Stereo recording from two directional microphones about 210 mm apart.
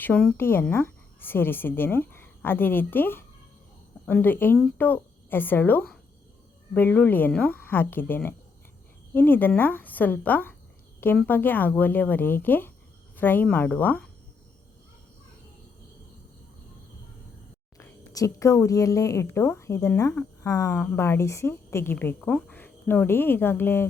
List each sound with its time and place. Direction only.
0.0 s speech: 5° left (ahead or behind)
17.7 s speech: 15° left (ahead or behind)